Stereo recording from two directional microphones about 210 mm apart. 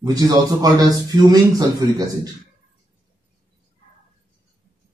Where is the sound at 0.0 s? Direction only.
15° right (ahead or behind).